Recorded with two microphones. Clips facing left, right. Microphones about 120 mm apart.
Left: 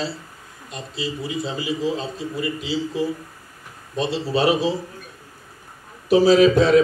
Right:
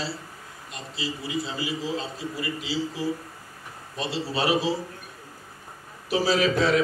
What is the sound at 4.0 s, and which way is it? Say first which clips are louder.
Speech: left 7 dB; 20° left (ahead or behind).